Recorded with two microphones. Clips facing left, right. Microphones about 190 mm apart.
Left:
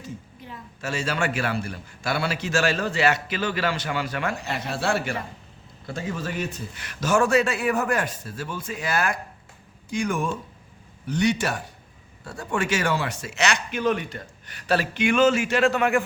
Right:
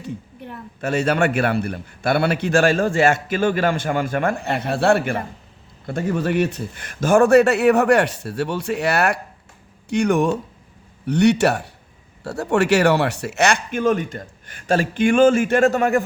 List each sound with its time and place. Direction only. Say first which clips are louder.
0.0 s a man's voice: right 6 dB; 60° right (ahead or behind); by 16.0 s 40° right (ahead or behind)